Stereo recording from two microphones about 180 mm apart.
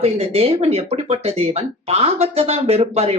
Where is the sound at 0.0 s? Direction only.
35° right (ahead or behind).